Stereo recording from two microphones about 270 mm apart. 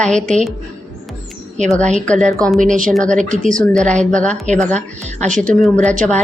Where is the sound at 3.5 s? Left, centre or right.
Right.